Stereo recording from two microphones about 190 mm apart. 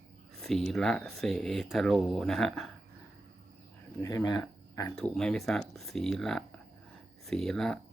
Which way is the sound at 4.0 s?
20° left (ahead or behind).